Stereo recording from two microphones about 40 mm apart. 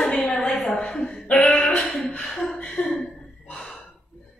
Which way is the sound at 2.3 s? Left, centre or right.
Centre.